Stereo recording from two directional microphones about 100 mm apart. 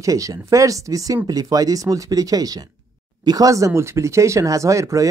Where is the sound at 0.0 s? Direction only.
35° right (ahead or behind).